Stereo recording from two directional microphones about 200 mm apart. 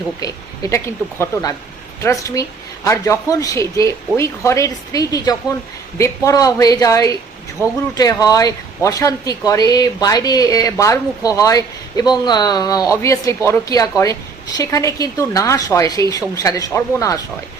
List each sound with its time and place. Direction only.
0.2 s speech: 20° left (ahead or behind)